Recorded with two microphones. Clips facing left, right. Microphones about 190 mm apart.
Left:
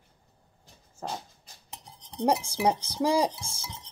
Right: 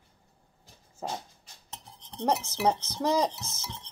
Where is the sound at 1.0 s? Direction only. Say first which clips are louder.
Even; 10° right (ahead or behind).